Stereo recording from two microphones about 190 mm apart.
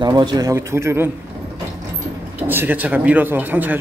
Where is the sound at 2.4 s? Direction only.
10° right (ahead or behind).